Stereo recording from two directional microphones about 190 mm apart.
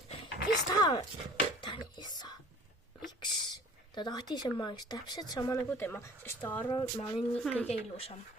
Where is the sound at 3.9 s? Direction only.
20° left (ahead or behind).